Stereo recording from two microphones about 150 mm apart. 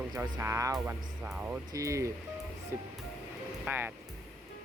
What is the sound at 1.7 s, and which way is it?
Speech, 20° right (ahead or behind).